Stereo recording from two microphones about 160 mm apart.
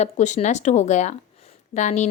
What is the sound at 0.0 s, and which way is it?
A woman's voice, 45° left (ahead or behind).